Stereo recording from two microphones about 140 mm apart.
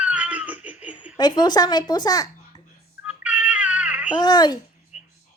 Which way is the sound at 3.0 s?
10° right (ahead or behind).